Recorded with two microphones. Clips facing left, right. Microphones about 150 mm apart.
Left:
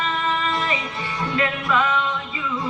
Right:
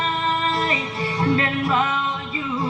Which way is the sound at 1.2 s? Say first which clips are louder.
Right 3 dB; 30° right (ahead or behind).